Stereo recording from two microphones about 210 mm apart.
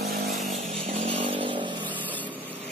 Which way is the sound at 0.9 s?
30° right (ahead or behind).